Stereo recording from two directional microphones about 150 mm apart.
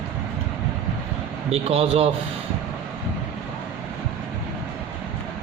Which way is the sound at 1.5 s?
45° right (ahead or behind).